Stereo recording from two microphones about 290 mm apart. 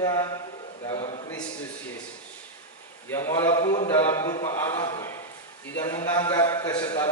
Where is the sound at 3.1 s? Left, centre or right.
Centre.